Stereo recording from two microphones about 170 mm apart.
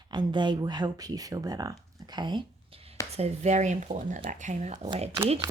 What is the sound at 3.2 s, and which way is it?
Speech, 40° right (ahead or behind).